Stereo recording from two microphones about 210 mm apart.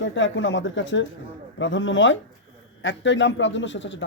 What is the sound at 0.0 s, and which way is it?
A man's voice, 65° left (ahead or behind).